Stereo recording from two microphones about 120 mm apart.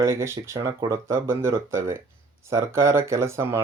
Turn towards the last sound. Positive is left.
turn(degrees=-20)  # may be behind; listen again after turning